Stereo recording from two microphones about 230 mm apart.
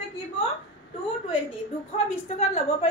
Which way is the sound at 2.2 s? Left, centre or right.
Left.